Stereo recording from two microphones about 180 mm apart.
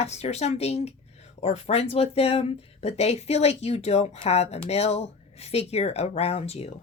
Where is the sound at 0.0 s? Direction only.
35° left (ahead or behind).